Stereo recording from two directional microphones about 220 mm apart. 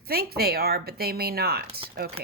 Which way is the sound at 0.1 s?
45° right (ahead or behind).